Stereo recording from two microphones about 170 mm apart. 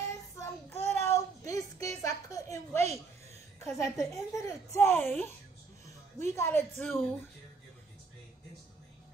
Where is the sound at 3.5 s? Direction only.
15° left (ahead or behind).